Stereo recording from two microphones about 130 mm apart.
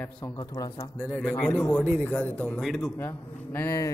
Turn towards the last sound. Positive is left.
turn(degrees=25)  # may be behind; listen again after turning